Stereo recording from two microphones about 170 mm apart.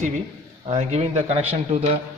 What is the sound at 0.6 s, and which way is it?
Speech, 40° right (ahead or behind).